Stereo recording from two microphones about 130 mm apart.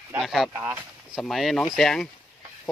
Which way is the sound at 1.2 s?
Centre (ahead or behind).